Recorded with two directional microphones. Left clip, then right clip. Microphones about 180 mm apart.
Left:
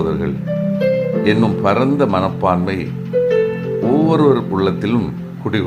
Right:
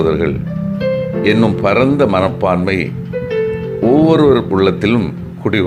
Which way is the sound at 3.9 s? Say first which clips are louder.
Right 4 dB; 10° right (ahead or behind).